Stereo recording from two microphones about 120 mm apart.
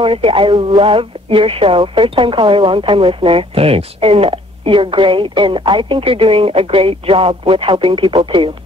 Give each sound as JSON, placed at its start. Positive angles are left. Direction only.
{"t": 0.0, "sound": "speech", "side_deg": -50}